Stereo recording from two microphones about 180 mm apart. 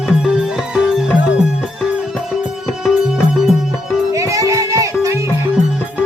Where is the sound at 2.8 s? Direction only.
5° right (ahead or behind).